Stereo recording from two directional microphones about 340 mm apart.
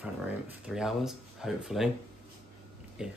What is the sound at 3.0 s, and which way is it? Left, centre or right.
Speech, centre.